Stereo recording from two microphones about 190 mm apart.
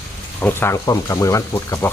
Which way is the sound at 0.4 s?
15° left (ahead or behind).